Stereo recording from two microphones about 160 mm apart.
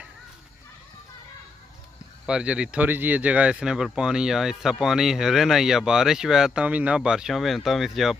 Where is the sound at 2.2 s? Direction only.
5° right (ahead or behind).